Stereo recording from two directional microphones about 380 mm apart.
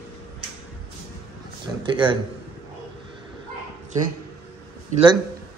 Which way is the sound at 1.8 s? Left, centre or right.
Centre.